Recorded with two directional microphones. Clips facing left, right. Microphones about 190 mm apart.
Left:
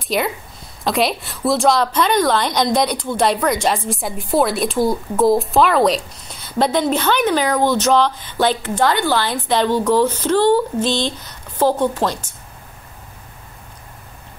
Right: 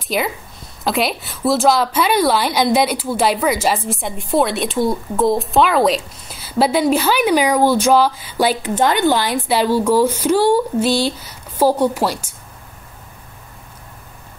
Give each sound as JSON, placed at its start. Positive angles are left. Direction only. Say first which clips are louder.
{"t": 0.1, "sound": "a woman's voice", "louder": "even", "side_deg": 0}